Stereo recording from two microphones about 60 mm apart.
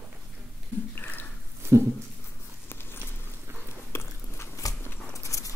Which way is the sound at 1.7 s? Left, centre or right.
Right.